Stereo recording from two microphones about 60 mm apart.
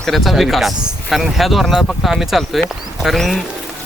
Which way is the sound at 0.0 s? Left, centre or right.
Centre.